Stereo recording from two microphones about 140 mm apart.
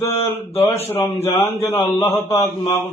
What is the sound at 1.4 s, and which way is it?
Speech, 20° left (ahead or behind).